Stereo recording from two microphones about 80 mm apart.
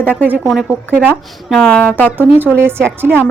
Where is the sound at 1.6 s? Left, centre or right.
Centre.